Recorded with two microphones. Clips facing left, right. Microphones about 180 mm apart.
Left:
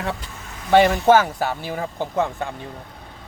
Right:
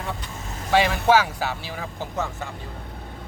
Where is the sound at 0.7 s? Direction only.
50° left (ahead or behind).